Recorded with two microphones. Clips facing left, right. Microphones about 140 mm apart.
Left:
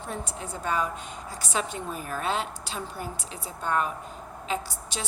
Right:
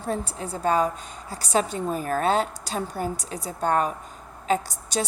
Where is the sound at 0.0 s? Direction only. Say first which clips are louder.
Right 6 dB; 35° right (ahead or behind).